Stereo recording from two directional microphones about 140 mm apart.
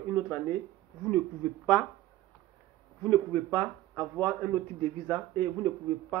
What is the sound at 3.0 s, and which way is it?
A man's voice, 15° left (ahead or behind).